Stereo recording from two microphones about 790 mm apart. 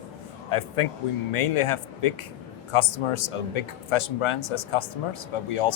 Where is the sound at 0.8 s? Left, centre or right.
Left.